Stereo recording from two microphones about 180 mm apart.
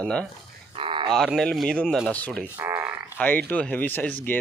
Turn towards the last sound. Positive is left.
turn(degrees=10)  # may be behind; listen again after turning